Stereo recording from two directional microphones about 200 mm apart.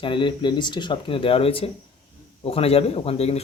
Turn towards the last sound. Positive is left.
turn(degrees=30)  # may be behind; listen again after turning